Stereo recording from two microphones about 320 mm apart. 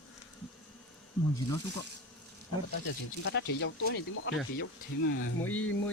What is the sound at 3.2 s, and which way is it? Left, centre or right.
Speech, left.